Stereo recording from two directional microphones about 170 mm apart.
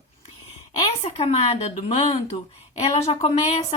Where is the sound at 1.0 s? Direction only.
35° left (ahead or behind).